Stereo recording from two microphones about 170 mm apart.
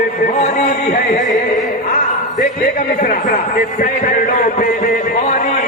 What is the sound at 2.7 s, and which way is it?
Music, 50° left (ahead or behind).